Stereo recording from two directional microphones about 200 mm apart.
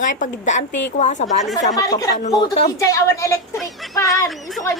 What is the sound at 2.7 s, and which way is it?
A woman's voice, 15° left (ahead or behind).